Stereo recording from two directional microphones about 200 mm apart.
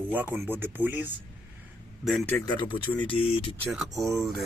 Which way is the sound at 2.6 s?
25° left (ahead or behind).